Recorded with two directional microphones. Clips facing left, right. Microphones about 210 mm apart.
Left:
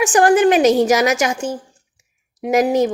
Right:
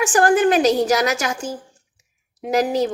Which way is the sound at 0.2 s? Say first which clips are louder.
Left 3 dB; 15° left (ahead or behind).